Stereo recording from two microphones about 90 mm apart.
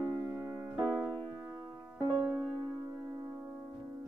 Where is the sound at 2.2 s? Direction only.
25° right (ahead or behind).